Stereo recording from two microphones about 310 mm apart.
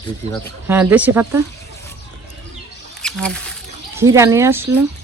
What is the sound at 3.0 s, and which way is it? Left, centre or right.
Speech, centre.